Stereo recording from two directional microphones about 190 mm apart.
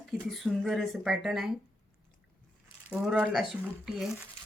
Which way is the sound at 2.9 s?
5° right (ahead or behind).